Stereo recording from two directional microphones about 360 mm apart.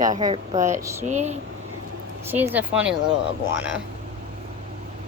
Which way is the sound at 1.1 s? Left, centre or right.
Centre.